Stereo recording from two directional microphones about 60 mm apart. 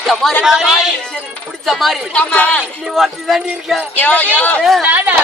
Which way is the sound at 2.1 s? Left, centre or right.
Left.